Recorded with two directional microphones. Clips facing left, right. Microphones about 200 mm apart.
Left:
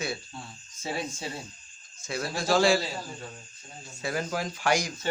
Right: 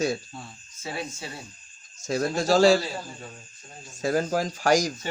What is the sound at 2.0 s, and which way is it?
Speech, 40° right (ahead or behind).